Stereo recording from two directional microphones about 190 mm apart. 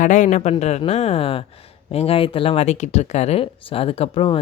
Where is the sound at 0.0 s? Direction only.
40° left (ahead or behind).